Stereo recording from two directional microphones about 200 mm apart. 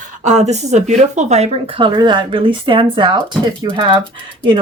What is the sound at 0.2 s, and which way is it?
Speech, 35° right (ahead or behind).